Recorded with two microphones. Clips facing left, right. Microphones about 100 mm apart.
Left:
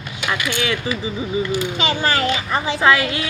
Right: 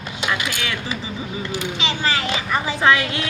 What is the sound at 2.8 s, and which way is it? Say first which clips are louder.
Speech: left 1 dB; 5° left (ahead or behind).